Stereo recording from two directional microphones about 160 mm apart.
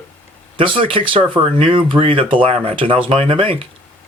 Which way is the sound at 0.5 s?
30° right (ahead or behind).